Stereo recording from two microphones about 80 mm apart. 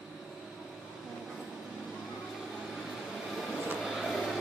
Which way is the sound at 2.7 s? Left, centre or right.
Centre.